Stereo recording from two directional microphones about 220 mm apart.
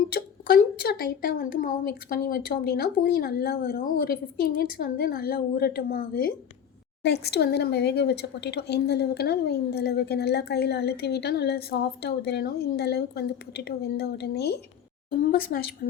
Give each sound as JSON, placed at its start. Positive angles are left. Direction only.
{"t": 0.1, "sound": "speech", "side_deg": 45}
{"t": 15.8, "sound": "speech", "side_deg": 45}